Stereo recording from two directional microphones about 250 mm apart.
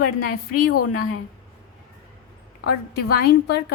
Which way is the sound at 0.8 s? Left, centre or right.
Left.